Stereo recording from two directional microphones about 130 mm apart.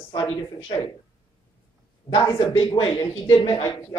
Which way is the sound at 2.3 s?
45° left (ahead or behind).